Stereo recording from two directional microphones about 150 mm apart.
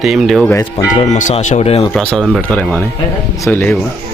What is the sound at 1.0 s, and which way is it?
Speech, 55° left (ahead or behind).